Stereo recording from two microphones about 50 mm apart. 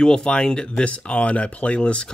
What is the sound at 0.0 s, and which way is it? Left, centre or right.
Speech, centre.